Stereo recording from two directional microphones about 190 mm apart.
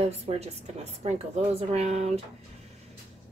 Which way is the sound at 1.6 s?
35° right (ahead or behind).